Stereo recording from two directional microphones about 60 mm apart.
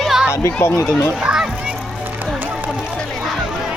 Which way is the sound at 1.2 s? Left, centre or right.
Centre.